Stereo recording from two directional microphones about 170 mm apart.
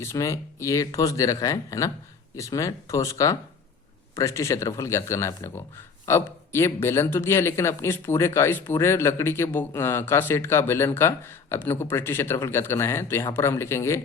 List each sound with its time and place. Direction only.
0.0 s speech: 15° left (ahead or behind)